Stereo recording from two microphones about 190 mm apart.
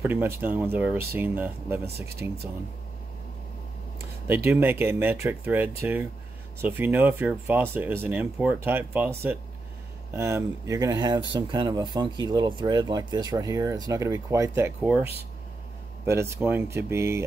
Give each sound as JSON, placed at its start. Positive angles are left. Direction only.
{"t": 0.0, "sound": "speech", "side_deg": -10}
{"t": 4.5, "sound": "speech", "side_deg": -10}
{"t": 16.1, "sound": "speech", "side_deg": -15}